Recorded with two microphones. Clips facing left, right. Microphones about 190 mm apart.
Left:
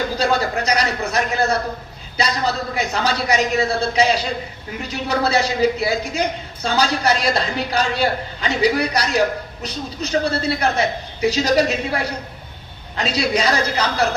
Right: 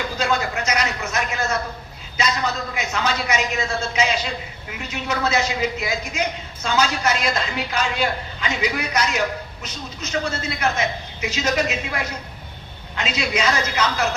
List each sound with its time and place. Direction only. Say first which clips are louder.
0.2 s a woman's voice: left 2 dB; 35° left (ahead or behind)